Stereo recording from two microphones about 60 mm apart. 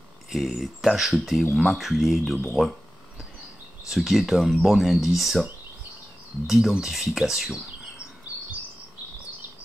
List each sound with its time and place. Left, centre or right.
0.3 s speech: centre
3.9 s speech: centre
6.4 s speech: centre
8.3 s chirp: right